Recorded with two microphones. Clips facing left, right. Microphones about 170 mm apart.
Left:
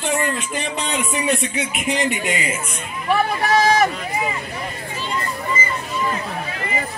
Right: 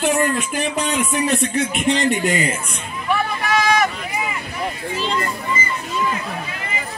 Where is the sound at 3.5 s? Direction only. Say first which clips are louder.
Left 1 dB; 35° left (ahead or behind).